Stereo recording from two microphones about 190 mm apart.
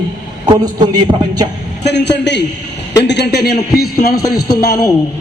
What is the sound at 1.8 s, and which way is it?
A man's voice, 65° left (ahead or behind).